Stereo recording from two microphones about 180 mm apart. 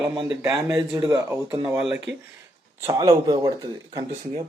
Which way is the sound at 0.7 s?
15° right (ahead or behind).